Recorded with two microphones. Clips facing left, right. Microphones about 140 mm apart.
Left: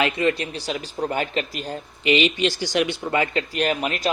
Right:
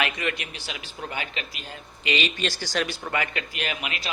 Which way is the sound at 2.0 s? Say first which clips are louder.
Left 8 dB; 20° left (ahead or behind).